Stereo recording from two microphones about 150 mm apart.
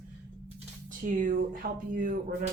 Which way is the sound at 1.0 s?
60° right (ahead or behind).